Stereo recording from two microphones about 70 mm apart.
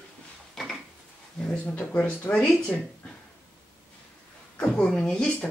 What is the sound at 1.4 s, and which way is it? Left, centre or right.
Speech, centre.